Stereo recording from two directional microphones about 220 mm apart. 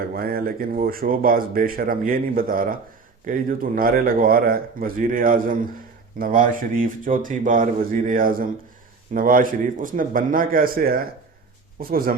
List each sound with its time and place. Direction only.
0.0 s speech: 40° right (ahead or behind)